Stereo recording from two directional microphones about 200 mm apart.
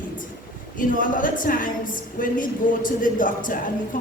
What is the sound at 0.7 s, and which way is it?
A woman's voice, 40° left (ahead or behind).